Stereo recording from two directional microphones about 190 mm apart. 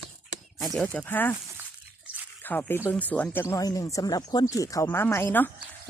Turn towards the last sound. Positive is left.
turn(degrees=10)  # may be behind; listen again after turning